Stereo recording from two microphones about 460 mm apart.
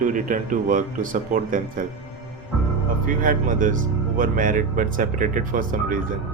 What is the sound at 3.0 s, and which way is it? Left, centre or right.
Speech, centre.